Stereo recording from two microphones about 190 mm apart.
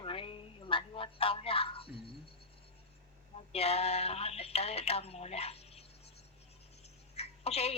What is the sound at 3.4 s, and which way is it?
Speech, 30° left (ahead or behind).